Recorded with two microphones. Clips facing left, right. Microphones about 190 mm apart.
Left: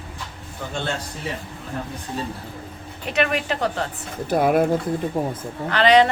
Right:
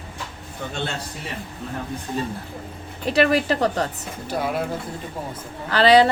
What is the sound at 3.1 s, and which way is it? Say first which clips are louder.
Speech: right 4 dB; 35° right (ahead or behind).